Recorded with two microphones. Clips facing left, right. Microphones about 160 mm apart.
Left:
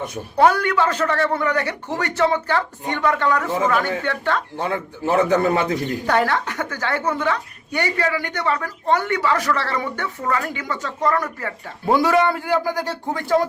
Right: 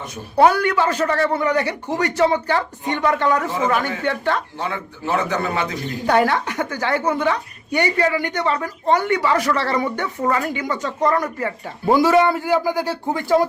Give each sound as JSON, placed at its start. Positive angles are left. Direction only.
{"t": 0.3, "sound": "a man's voice", "side_deg": -10}
{"t": 4.6, "sound": "a man's voice", "side_deg": 40}
{"t": 6.1, "sound": "a man's voice", "side_deg": -15}
{"t": 11.9, "sound": "a man's voice", "side_deg": 0}